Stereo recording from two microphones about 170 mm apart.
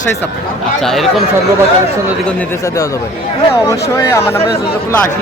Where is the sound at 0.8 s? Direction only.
Centre (ahead or behind).